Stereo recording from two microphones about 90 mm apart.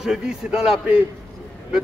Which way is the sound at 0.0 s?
10° right (ahead or behind).